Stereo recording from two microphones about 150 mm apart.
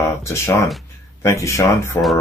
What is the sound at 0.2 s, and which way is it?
Speech, 20° left (ahead or behind).